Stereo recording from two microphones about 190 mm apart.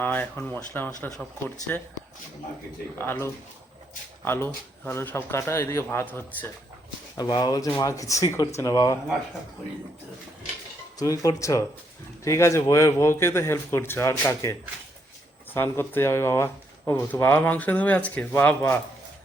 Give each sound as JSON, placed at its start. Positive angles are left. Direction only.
{"t": 0.0, "sound": "speech", "side_deg": 10}
{"t": 3.0, "sound": "speech", "side_deg": 10}
{"t": 7.2, "sound": "speech", "side_deg": 20}
{"t": 11.0, "sound": "speech", "side_deg": 20}
{"t": 15.5, "sound": "speech", "side_deg": 15}